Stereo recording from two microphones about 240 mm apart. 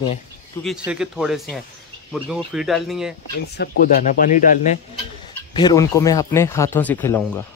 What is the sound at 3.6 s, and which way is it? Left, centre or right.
Speech, left.